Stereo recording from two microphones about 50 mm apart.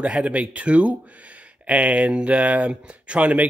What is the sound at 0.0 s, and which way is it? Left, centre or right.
Speech, right.